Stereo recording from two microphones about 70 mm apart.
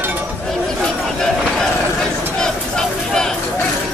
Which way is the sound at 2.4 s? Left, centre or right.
Centre.